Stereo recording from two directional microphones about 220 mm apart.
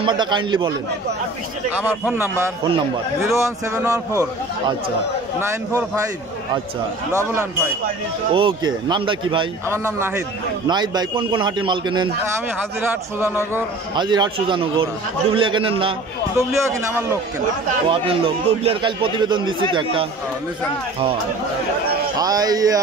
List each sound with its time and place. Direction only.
0.0 s a man's voice: 20° right (ahead or behind)
1.8 s a man's voice: 10° right (ahead or behind)
8.3 s a man's voice: 25° right (ahead or behind)
10.7 s a man's voice: 20° right (ahead or behind)
13.9 s a man's voice: 20° right (ahead or behind)
16.3 s a man's voice: 10° right (ahead or behind)
17.8 s a man's voice: 25° right (ahead or behind)
22.2 s a man's voice: 15° right (ahead or behind)